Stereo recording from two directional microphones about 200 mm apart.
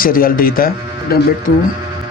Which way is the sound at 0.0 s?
45° left (ahead or behind).